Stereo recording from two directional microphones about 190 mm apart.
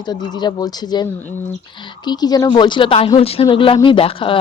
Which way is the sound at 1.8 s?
20° left (ahead or behind).